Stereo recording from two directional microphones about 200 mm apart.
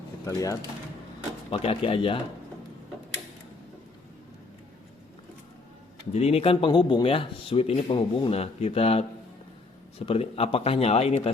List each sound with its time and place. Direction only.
0.3 s speech: 15° left (ahead or behind)
1.5 s speech: 30° left (ahead or behind)
6.1 s speech: 30° left (ahead or behind)
10.1 s speech: 30° left (ahead or behind)